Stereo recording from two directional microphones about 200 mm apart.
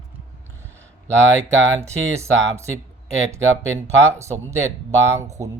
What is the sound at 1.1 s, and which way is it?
Speech, 70° right (ahead or behind).